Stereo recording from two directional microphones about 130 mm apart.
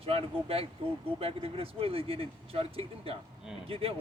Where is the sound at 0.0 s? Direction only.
45° right (ahead or behind).